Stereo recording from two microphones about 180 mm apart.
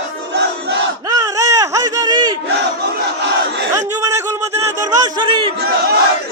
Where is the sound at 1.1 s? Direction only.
20° right (ahead or behind).